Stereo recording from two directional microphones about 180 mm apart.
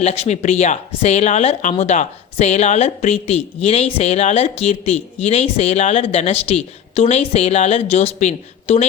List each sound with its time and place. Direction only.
0.0 s speech: 35° left (ahead or behind)